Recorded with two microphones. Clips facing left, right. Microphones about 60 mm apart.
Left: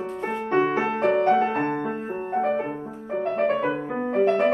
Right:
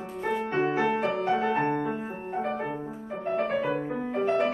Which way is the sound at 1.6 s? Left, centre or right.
Left.